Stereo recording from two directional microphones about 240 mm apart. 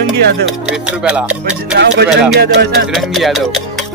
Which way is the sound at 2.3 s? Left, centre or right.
Right.